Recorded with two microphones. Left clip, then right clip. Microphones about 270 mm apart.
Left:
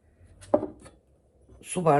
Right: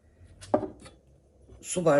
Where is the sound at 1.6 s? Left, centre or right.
Left.